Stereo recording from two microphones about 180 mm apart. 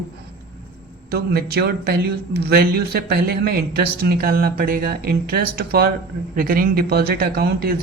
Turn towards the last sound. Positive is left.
turn(degrees=-55)  # may be behind; listen again after turning